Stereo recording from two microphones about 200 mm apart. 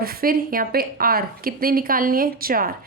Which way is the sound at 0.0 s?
50° right (ahead or behind).